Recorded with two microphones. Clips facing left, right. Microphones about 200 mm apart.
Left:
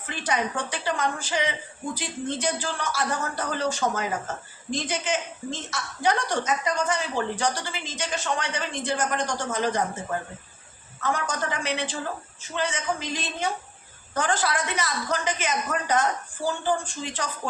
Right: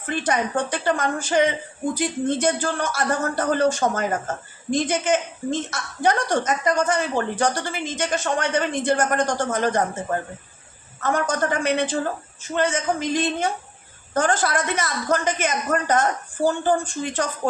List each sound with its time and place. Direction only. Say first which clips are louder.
0.1 s speech: right 5 dB; 50° right (ahead or behind)